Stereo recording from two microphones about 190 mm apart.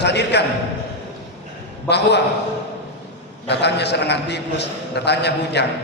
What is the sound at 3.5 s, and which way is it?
A man's voice, 60° left (ahead or behind).